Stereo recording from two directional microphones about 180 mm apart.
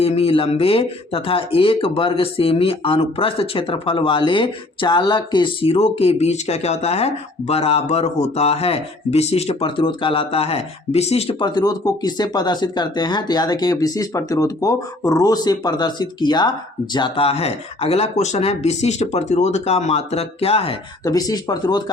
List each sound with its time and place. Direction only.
0.0 s speech: 35° left (ahead or behind)
21.0 s speech: 20° left (ahead or behind)